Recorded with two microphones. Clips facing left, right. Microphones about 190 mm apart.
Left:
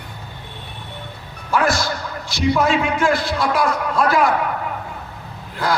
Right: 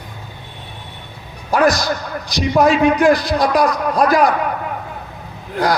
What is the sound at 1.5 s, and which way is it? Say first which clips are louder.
A man's voice: right 4 dB; 40° right (ahead or behind).